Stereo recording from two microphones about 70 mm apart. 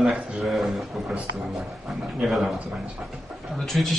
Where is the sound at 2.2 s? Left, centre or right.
Centre.